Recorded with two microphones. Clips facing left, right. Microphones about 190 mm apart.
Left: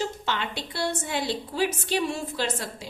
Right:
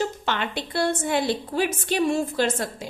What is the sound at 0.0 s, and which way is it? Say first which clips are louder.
A woman's voice: right 3 dB; 55° right (ahead or behind).